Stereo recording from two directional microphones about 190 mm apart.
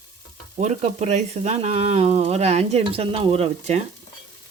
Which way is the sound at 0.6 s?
35° right (ahead or behind).